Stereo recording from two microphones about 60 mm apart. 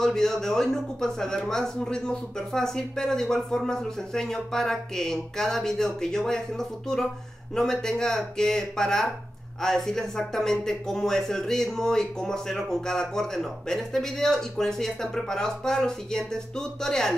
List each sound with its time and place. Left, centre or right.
0.0 s speech: centre